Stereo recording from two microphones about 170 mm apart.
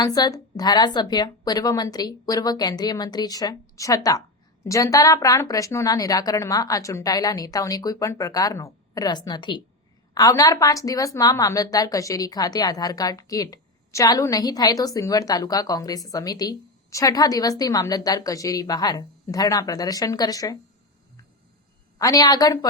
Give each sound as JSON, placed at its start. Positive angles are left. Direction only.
{"t": 0.0, "sound": "a woman's voice", "side_deg": 20}
{"t": 21.9, "sound": "a woman's voice", "side_deg": 20}